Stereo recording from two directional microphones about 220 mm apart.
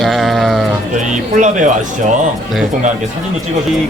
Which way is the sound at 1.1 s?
35° right (ahead or behind).